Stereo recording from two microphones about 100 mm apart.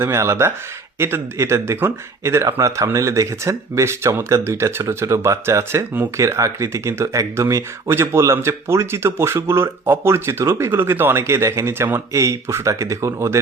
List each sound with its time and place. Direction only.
0.0 s speech: 25° right (ahead or behind)